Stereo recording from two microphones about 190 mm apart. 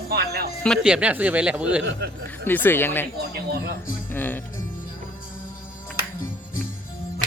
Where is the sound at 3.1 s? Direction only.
55° right (ahead or behind).